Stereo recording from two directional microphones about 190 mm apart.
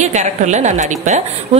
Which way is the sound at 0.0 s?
40° right (ahead or behind).